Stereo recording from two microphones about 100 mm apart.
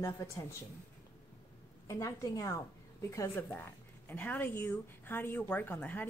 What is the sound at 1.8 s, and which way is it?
A woman's voice, 35° left (ahead or behind).